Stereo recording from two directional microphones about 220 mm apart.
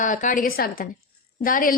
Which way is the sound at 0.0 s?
35° left (ahead or behind).